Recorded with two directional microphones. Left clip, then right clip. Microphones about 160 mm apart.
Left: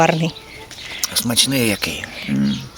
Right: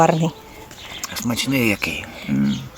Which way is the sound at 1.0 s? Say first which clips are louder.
Left 7 dB; 40° left (ahead or behind).